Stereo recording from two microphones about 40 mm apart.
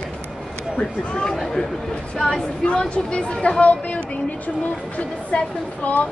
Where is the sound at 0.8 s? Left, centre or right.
Left.